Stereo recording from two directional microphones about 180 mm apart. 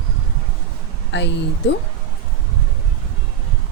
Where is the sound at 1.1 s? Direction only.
75° left (ahead or behind).